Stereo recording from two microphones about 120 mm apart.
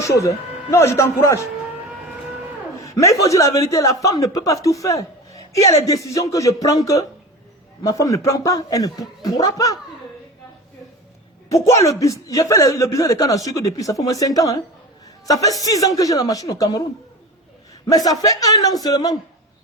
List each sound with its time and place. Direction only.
0.0 s a man's voice: 25° left (ahead or behind)
2.8 s a man's voice: 25° left (ahead or behind)
11.4 s a man's voice: 25° left (ahead or behind)
17.8 s a man's voice: 30° left (ahead or behind)